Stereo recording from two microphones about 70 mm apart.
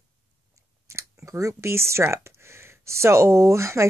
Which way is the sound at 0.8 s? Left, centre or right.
Right.